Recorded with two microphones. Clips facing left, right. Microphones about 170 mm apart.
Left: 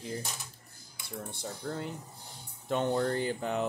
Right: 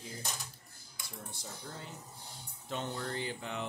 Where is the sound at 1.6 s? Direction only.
60° left (ahead or behind).